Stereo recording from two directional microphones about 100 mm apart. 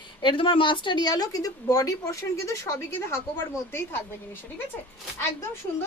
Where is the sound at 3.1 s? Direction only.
25° left (ahead or behind).